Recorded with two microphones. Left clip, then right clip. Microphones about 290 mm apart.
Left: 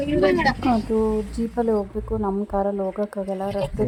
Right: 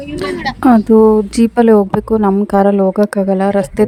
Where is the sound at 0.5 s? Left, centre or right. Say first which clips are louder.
Right 13 dB; right.